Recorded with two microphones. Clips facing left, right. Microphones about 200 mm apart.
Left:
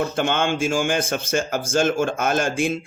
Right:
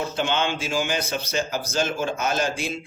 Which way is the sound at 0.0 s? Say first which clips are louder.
Left 3 dB; 50° left (ahead or behind).